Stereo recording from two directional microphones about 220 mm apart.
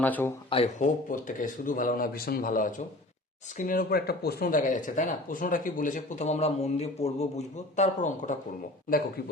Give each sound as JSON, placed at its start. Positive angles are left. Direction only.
{"t": 0.0, "sound": "speech", "side_deg": 10}
{"t": 0.5, "sound": "speech", "side_deg": 30}